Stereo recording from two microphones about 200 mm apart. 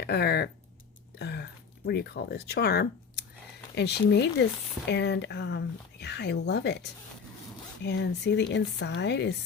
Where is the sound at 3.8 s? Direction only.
55° left (ahead or behind).